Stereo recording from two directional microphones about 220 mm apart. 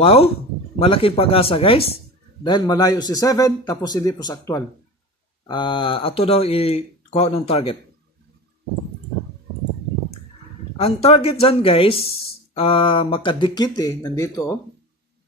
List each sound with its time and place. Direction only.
0.0 s a man's voice: 25° left (ahead or behind)
10.8 s speech: 25° left (ahead or behind)